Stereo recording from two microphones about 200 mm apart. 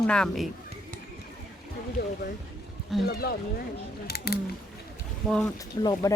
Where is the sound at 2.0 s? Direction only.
55° left (ahead or behind).